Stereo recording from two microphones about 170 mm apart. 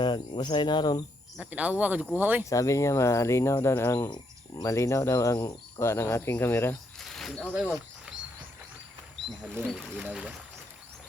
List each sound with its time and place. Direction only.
0.0 s speech: 25° left (ahead or behind)
1.4 s speech: 10° right (ahead or behind)
2.4 s speech: 20° left (ahead or behind)
7.0 s a sound: centre (ahead or behind)
7.5 s speech: centre (ahead or behind)
9.4 s speech: centre (ahead or behind)